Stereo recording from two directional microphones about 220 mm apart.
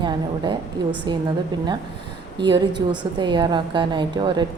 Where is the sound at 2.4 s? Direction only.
20° right (ahead or behind).